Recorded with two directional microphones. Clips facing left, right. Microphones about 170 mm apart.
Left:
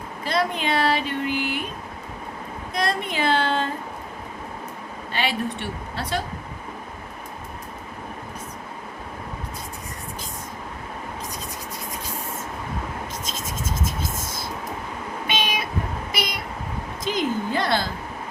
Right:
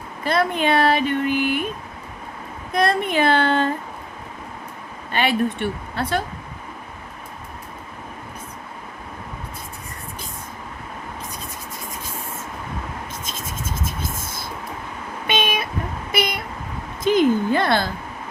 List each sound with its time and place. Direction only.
0.3 s speech: 55° right (ahead or behind)
2.7 s speech: 55° right (ahead or behind)
5.1 s speech: 55° right (ahead or behind)
15.3 s cat: 55° right (ahead or behind)
16.1 s a sound: 55° right (ahead or behind)